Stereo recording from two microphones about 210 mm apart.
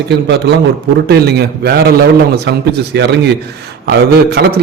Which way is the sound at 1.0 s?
50° right (ahead or behind).